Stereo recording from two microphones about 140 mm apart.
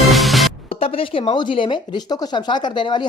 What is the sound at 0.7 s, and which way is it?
Speech, 40° left (ahead or behind).